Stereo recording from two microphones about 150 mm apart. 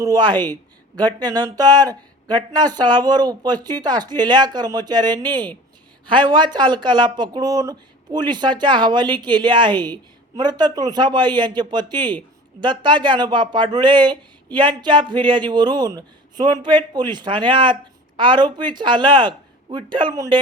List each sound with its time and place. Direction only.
0.0 s speech: 25° right (ahead or behind)